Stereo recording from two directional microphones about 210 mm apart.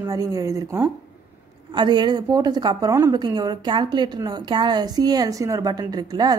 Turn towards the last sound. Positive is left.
turn(degrees=-20)  # may be behind; listen again after turning